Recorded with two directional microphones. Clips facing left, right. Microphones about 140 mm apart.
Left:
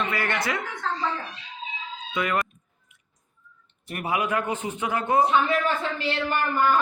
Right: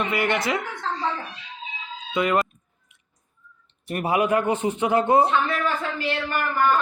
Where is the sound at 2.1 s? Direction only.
25° right (ahead or behind).